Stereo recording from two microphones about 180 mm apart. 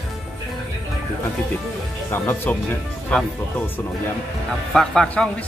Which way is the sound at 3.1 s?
5° left (ahead or behind).